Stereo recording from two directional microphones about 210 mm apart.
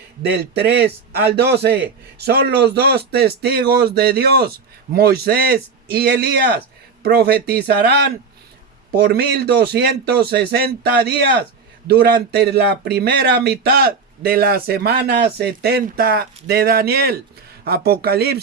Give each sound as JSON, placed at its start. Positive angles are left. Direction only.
{"t": 0.2, "sound": "speech", "side_deg": -50}